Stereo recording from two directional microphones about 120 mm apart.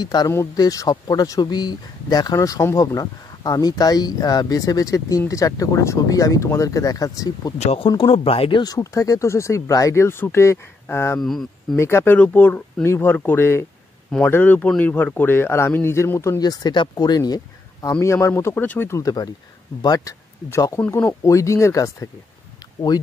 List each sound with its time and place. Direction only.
0.0 s a man's voice: 35° left (ahead or behind)
7.5 s speech: 60° left (ahead or behind)
8.0 s speech: 50° left (ahead or behind)
8.6 s a man's voice: 30° left (ahead or behind)
11.1 s speech: 5° left (ahead or behind)
11.7 s a man's voice: 20° left (ahead or behind)